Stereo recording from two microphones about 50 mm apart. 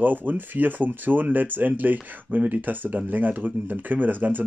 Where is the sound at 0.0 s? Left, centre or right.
Right.